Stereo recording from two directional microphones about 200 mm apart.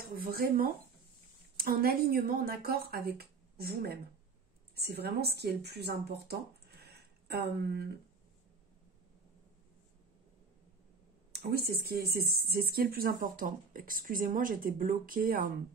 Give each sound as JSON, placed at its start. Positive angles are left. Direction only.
{"t": 0.1, "sound": "speech", "side_deg": -50}
{"t": 6.8, "sound": "a sound", "side_deg": -55}
{"t": 11.3, "sound": "speech", "side_deg": -55}